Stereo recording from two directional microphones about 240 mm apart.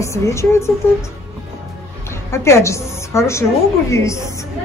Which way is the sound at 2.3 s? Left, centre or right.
Centre.